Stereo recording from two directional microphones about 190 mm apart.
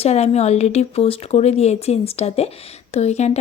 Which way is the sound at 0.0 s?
35° left (ahead or behind).